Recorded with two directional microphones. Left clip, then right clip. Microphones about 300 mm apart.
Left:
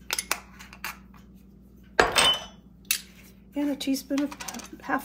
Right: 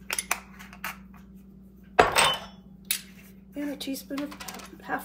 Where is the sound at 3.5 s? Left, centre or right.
Centre.